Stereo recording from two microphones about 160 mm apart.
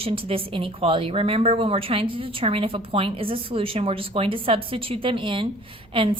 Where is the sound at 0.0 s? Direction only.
35° right (ahead or behind).